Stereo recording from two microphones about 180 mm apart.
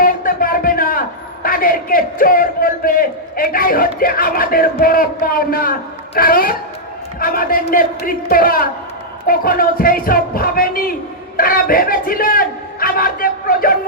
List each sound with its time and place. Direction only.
0.0 s a man's voice: 55° left (ahead or behind)